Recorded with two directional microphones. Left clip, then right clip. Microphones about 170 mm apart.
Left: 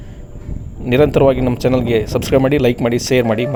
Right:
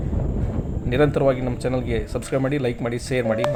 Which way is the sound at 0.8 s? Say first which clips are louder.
Left 7 dB; 50° left (ahead or behind).